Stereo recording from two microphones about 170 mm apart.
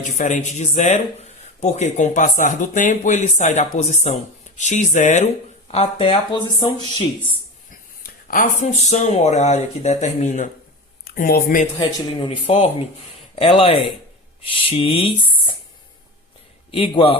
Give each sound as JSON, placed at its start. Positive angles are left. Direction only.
{"t": 0.0, "sound": "speech", "side_deg": 45}
{"t": 5.7, "sound": "speech", "side_deg": 35}
{"t": 8.3, "sound": "speech", "side_deg": 50}
{"t": 11.0, "sound": "speech", "side_deg": 60}
{"t": 12.5, "sound": "speech", "side_deg": 40}
{"t": 16.7, "sound": "speech", "side_deg": 30}